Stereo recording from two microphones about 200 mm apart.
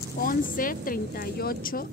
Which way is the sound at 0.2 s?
45° left (ahead or behind).